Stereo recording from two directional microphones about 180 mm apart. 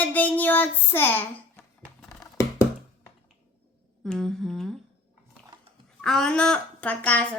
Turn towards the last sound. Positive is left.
turn(degrees=10)  # may be behind; listen again after turning